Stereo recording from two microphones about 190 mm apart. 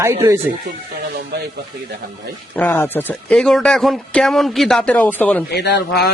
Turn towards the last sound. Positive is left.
turn(degrees=60)  # may be behind; listen again after turning